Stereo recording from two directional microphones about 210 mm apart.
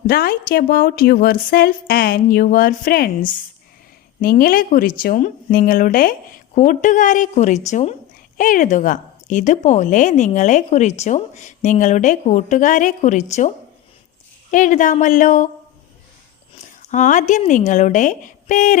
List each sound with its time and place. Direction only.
0.1 s a woman's voice: 45° left (ahead or behind)
4.2 s a woman's voice: 45° left (ahead or behind)
14.5 s a woman's voice: 40° left (ahead or behind)
16.6 s a woman's voice: 35° left (ahead or behind)